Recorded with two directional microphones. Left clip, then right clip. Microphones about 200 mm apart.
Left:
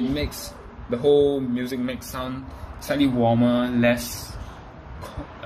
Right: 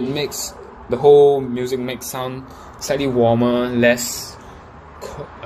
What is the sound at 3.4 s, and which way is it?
Speech, 20° right (ahead or behind).